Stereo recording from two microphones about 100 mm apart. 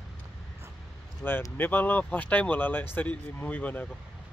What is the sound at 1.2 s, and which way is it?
Speech, 20° left (ahead or behind).